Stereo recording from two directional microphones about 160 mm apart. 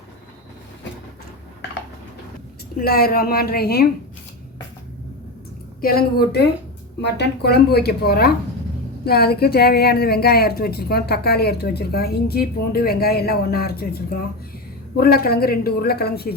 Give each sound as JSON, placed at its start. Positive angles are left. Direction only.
{"t": 2.7, "sound": "a woman's voice", "side_deg": 70}
{"t": 5.8, "sound": "a woman's voice", "side_deg": 75}